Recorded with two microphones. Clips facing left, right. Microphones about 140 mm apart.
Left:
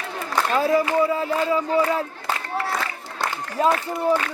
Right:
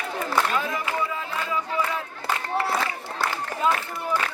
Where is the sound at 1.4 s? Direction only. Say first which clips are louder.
Left 6 dB; 35° left (ahead or behind).